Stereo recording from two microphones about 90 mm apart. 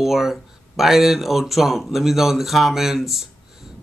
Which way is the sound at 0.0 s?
5° right (ahead or behind).